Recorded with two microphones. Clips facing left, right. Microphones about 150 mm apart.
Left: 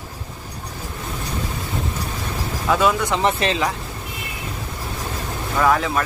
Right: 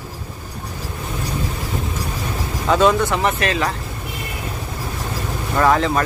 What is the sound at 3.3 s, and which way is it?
Speech, 25° left (ahead or behind).